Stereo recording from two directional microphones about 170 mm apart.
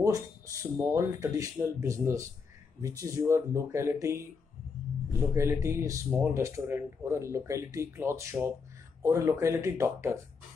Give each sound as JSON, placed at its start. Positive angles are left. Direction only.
{"t": 0.0, "sound": "speech", "side_deg": -15}
{"t": 5.3, "sound": "speech", "side_deg": -15}